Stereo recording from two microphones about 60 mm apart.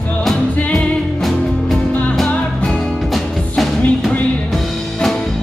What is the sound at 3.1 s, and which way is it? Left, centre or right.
Music, centre.